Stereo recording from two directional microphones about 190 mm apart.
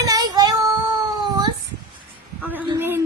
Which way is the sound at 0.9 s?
20° right (ahead or behind).